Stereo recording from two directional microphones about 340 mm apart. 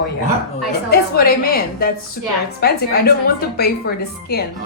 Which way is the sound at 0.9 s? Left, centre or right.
Left.